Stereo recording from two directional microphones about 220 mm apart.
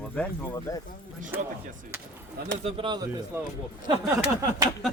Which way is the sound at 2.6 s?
25° right (ahead or behind).